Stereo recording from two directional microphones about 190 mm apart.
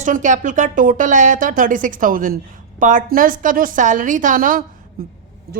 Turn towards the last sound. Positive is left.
turn(degrees=-50)  # may be behind; listen again after turning